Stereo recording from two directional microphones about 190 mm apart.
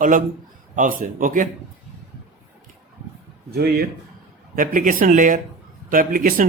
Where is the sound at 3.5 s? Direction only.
55° right (ahead or behind).